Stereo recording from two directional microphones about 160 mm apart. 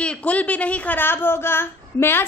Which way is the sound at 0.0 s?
10° left (ahead or behind).